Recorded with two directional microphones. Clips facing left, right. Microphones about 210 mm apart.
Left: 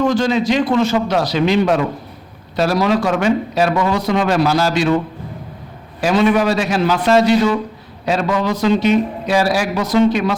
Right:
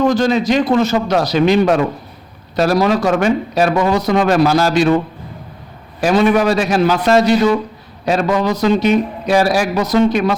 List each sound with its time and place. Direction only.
0.0 s a man's voice: 40° right (ahead or behind)
6.0 s a man's voice: 45° right (ahead or behind)